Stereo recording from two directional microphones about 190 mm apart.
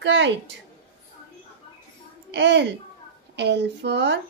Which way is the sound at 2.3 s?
70° right (ahead or behind).